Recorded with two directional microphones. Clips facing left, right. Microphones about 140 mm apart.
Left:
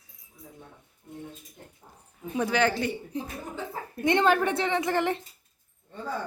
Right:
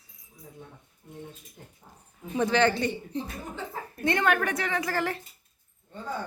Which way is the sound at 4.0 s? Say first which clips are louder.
Left 3 dB; 25° left (ahead or behind).